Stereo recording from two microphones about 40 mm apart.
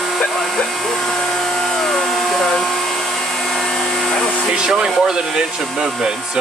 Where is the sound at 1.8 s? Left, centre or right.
Centre.